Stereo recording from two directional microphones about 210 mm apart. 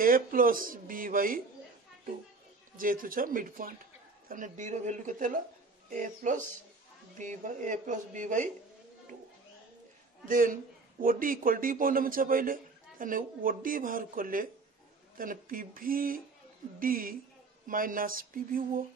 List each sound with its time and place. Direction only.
0.0 s a man's voice: 40° right (ahead or behind)
2.8 s a man's voice: 40° right (ahead or behind)
10.2 s a man's voice: 40° right (ahead or behind)